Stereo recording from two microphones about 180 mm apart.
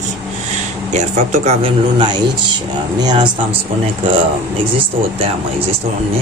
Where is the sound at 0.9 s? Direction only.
40° right (ahead or behind); by 3.2 s 25° right (ahead or behind).